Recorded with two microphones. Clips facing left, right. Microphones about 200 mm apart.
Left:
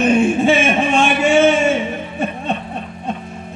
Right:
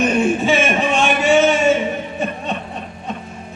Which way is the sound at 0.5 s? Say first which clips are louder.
Left 2 dB; 50° left (ahead or behind).